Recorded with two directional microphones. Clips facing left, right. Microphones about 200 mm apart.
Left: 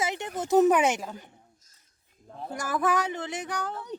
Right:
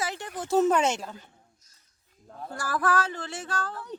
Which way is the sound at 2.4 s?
20° left (ahead or behind).